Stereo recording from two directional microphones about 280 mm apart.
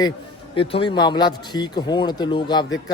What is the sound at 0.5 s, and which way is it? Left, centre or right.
Speech, centre.